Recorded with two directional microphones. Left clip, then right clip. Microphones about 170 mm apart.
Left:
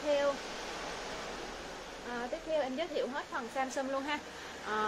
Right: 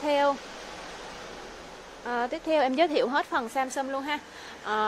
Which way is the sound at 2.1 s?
60° right (ahead or behind).